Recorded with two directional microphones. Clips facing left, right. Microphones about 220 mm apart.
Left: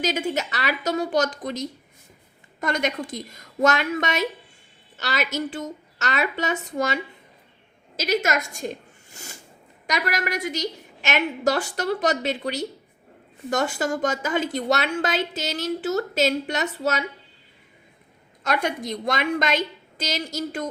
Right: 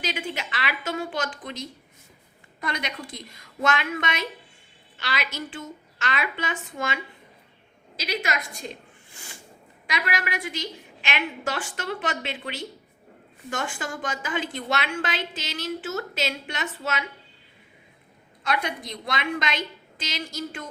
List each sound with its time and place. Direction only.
0.0 s a woman's voice: 45° left (ahead or behind)
18.4 s a woman's voice: 45° left (ahead or behind)